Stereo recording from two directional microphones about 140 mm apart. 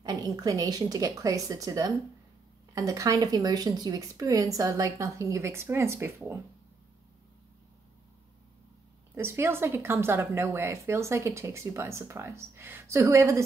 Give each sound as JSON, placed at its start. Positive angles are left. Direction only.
{"t": 0.0, "sound": "speech", "side_deg": -25}
{"t": 9.1, "sound": "speech", "side_deg": -20}